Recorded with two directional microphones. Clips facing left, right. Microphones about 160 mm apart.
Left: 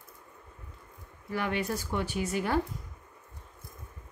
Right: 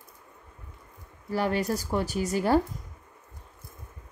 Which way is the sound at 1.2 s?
35° right (ahead or behind).